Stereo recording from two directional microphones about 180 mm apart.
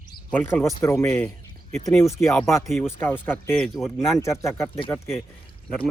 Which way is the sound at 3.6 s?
Centre (ahead or behind).